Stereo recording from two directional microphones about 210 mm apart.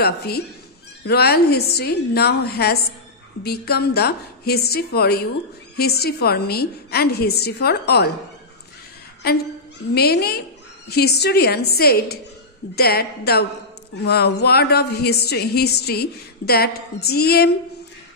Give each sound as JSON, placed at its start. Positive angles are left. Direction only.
{"t": 0.0, "sound": "speech", "side_deg": 50}
{"t": 9.2, "sound": "speech", "side_deg": 50}